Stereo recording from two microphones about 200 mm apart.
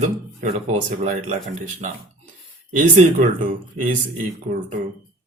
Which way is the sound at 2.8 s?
35° right (ahead or behind).